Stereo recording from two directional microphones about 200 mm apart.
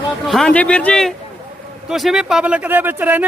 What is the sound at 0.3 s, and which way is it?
A man's voice, centre (ahead or behind).